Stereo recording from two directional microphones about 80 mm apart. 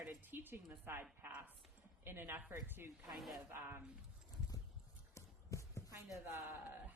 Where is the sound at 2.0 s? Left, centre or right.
Right.